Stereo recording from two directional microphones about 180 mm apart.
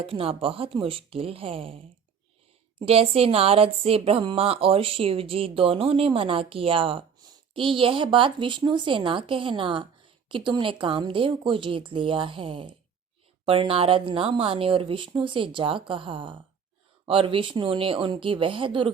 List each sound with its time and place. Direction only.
0.0 s speech: 30° right (ahead or behind)